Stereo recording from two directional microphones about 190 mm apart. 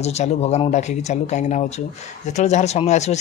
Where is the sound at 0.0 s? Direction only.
35° left (ahead or behind).